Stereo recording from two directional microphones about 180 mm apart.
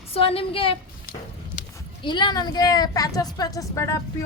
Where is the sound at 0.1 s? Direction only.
30° left (ahead or behind).